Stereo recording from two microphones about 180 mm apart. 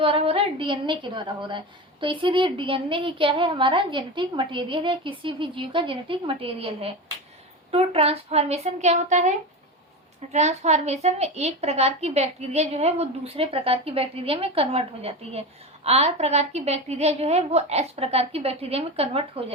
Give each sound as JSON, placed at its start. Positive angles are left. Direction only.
{"t": 0.0, "sound": "a woman's voice", "side_deg": -30}
{"t": 10.3, "sound": "a woman's voice", "side_deg": -40}